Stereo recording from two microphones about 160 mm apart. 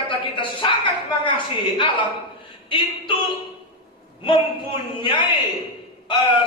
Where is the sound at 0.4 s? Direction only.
30° left (ahead or behind).